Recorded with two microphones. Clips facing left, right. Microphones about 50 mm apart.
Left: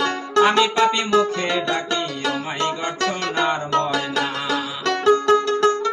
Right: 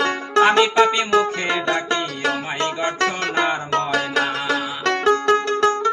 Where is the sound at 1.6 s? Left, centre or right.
Centre.